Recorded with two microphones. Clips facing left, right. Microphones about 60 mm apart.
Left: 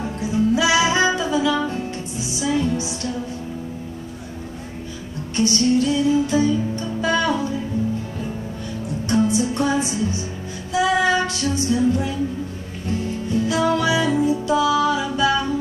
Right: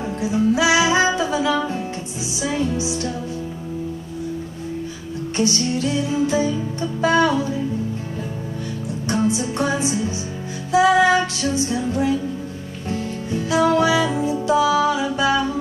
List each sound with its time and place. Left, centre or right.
0.0 s music: right
5.3 s music: right
9.0 s music: right
13.3 s music: right